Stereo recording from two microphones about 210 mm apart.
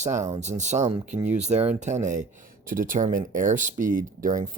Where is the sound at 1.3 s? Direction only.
30° right (ahead or behind).